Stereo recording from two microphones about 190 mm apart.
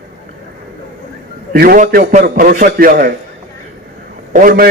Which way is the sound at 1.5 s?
50° right (ahead or behind).